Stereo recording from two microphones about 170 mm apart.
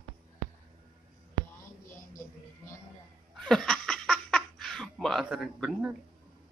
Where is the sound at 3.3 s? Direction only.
5° left (ahead or behind).